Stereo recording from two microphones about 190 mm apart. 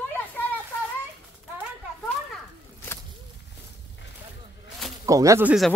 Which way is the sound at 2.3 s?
10° left (ahead or behind).